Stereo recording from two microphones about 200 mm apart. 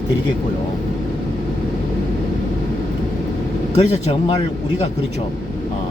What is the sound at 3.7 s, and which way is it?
Speech, 30° left (ahead or behind).